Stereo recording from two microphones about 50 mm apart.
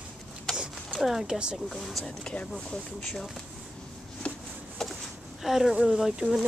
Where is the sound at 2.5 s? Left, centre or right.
Centre.